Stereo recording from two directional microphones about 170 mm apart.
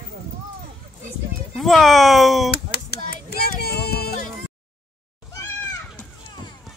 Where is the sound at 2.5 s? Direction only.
70° left (ahead or behind).